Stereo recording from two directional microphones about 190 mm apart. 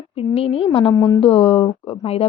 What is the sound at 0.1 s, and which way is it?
A woman's voice, 30° left (ahead or behind).